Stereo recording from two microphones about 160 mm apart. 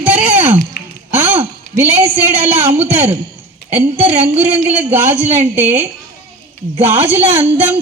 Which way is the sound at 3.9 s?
40° right (ahead or behind).